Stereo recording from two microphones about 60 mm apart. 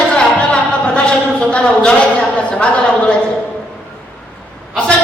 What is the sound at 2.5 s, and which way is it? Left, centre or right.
Speech, left.